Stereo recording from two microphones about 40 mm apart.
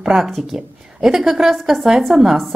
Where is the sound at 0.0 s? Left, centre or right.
Centre.